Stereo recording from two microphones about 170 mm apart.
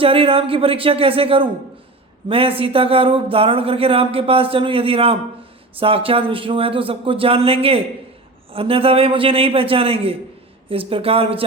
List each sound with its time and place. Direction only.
0.0 s speech: 35° right (ahead or behind)